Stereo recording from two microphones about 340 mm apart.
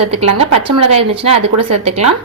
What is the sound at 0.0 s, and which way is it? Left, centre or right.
A woman's voice, centre.